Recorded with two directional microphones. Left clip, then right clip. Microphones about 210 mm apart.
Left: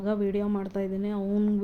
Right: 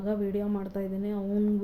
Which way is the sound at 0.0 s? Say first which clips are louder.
Left 2 dB; 10° left (ahead or behind).